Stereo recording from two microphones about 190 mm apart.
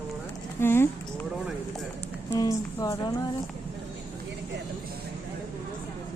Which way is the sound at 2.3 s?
20° left (ahead or behind).